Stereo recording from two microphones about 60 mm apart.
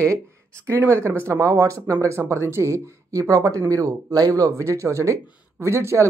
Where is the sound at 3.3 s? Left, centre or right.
Right.